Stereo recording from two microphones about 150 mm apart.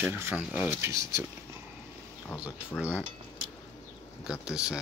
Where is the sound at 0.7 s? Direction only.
15° right (ahead or behind).